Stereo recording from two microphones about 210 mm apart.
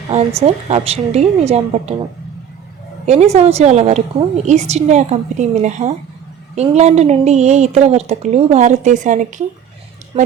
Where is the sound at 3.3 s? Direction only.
30° right (ahead or behind).